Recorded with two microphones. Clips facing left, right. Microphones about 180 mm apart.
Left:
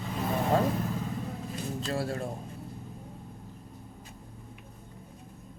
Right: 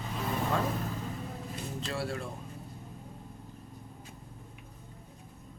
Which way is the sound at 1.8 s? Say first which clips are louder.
Left 3 dB; 40° left (ahead or behind).